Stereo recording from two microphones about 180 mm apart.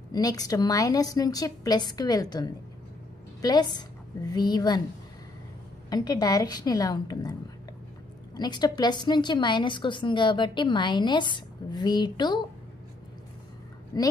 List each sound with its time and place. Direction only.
0.1 s a woman's voice: 20° left (ahead or behind)
5.9 s a woman's voice: 20° left (ahead or behind)
8.4 s a woman's voice: 25° left (ahead or behind)
13.9 s speech: 20° left (ahead or behind)